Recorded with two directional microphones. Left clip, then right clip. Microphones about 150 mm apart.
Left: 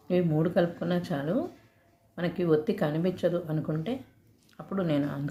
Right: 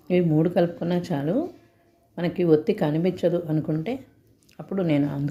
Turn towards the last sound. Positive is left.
turn(degrees=-25)  # may be behind; listen again after turning